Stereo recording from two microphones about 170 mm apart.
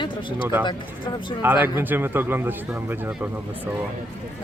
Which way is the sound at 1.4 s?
10° right (ahead or behind).